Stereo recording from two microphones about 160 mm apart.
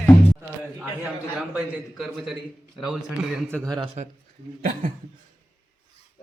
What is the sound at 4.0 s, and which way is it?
Speech, 45° right (ahead or behind).